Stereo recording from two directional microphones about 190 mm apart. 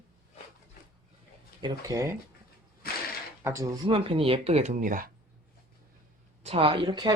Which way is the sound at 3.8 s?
30° right (ahead or behind).